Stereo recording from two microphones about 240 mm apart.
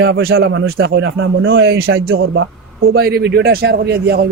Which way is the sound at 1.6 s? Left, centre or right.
Right.